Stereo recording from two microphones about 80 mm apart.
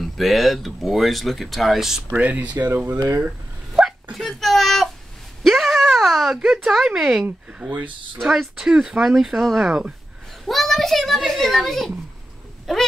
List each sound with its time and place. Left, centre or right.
0.0 s speech: centre
2.1 s speech: centre
3.7 s a sound: centre
7.6 s speech: right
8.2 s speech: centre